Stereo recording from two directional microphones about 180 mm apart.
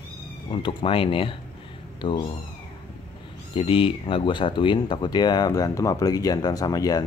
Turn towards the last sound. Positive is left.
turn(degrees=20)  # may be behind; listen again after turning